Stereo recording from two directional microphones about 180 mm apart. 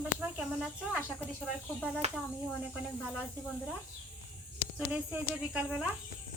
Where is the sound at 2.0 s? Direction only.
35° right (ahead or behind).